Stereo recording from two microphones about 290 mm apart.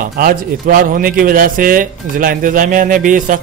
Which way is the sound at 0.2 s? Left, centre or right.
Right.